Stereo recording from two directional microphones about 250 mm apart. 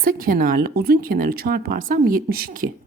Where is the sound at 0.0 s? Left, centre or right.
Right.